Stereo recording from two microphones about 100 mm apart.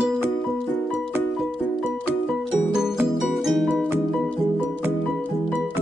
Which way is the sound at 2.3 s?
5° right (ahead or behind).